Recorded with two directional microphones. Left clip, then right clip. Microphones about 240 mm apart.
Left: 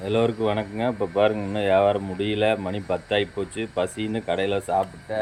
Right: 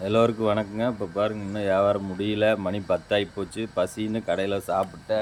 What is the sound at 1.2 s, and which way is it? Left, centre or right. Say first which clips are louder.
Speech: left 6 dB; centre.